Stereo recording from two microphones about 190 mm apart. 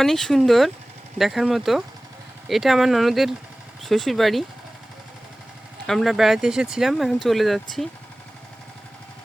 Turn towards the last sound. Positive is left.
turn(degrees=0)  # may be behind; listen again after turning